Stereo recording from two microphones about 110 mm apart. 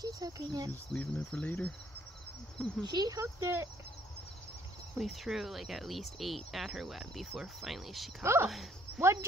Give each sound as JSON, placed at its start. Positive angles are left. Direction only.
{"t": 0.0, "sound": "speech", "side_deg": -40}
{"t": 0.7, "sound": "cricket", "side_deg": 10}
{"t": 2.8, "sound": "speech", "side_deg": -40}
{"t": 4.9, "sound": "speech", "side_deg": 0}
{"t": 8.2, "sound": "speech", "side_deg": -25}
{"t": 8.5, "sound": "speech", "side_deg": 0}